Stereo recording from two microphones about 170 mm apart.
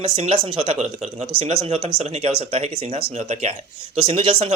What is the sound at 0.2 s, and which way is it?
Speech, 35° right (ahead or behind).